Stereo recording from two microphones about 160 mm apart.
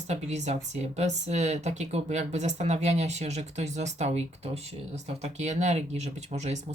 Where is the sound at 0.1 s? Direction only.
45° right (ahead or behind).